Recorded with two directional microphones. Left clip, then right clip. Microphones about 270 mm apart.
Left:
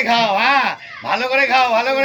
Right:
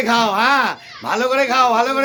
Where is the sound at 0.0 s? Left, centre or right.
Centre.